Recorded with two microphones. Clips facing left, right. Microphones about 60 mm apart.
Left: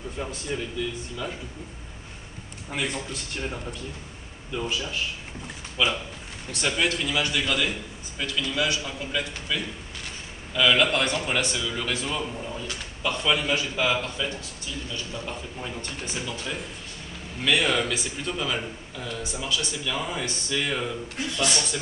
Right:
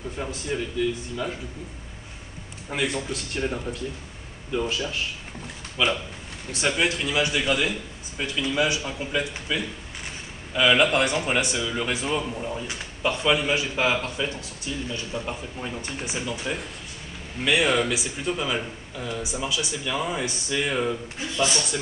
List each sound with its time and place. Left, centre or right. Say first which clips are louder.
0.2 s speech: right 2 dB; centre
2.7 s a man's voice: right 3 dB; centre
5.8 s speech: right 1 dB; centre; by 15.3 s right
15.6 s speech: right 4 dB; centre